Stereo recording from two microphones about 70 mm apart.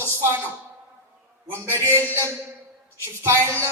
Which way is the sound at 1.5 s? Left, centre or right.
Right.